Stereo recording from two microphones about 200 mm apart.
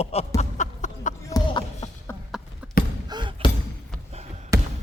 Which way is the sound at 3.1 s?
20° right (ahead or behind).